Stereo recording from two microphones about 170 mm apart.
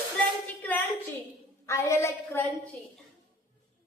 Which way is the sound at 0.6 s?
10° left (ahead or behind).